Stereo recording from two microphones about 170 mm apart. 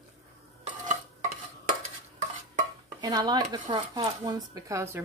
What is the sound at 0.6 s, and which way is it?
Dishes, 45° right (ahead or behind).